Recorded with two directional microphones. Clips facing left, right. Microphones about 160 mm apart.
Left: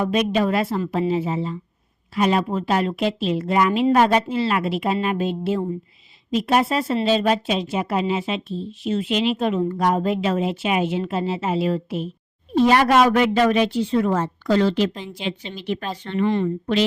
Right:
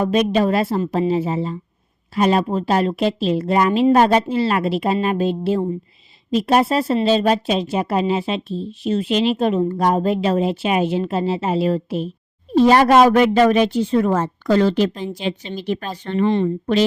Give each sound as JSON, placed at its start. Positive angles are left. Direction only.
{"t": 0.0, "sound": "speech", "side_deg": -35}
{"t": 16.2, "sound": "speech", "side_deg": -25}